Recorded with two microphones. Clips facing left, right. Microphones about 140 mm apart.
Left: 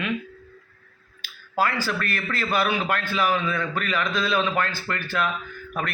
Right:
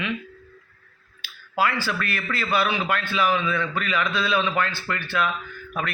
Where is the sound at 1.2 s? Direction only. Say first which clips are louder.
Even; 40° left (ahead or behind).